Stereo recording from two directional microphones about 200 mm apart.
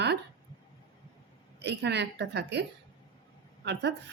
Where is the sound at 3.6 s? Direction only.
60° right (ahead or behind).